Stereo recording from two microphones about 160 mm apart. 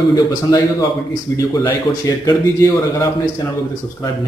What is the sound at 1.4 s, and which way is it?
A man's voice, 20° left (ahead or behind).